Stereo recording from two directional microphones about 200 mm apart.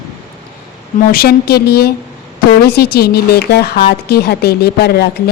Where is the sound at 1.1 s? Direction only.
50° left (ahead or behind).